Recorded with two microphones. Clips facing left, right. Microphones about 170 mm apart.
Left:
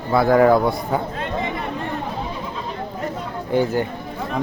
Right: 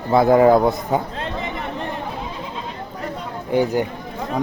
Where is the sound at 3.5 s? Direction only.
15° right (ahead or behind).